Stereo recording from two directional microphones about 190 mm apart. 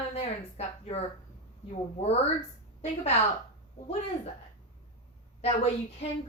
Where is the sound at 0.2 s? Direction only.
30° left (ahead or behind).